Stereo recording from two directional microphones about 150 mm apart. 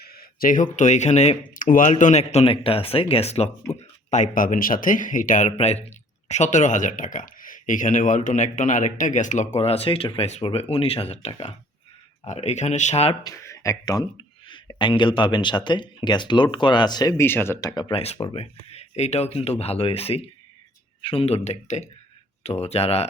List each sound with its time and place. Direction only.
0.0 s speech: 90° left; by 5.5 s 60° left (ahead or behind)
5.5 s speech: 45° left (ahead or behind)
13.2 s speech: 20° left (ahead or behind)
17.9 s speech: 40° left (ahead or behind)